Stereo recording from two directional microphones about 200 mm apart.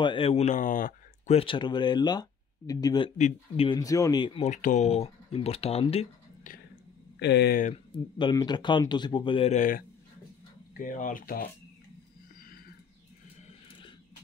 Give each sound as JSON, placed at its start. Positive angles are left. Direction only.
{"t": 0.0, "sound": "speech", "side_deg": 25}
{"t": 3.2, "sound": "speech", "side_deg": 35}
{"t": 3.6, "sound": "speech", "side_deg": 20}
{"t": 7.2, "sound": "speech", "side_deg": 60}
{"t": 7.6, "sound": "speech", "side_deg": 30}